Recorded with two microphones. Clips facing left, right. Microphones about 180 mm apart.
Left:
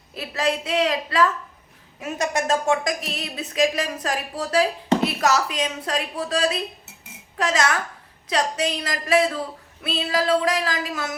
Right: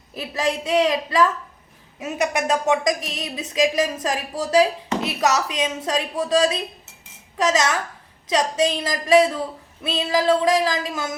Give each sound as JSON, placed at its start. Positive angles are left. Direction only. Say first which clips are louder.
{"t": 0.1, "sound": "a woman's voice", "louder": "even", "side_deg": -20}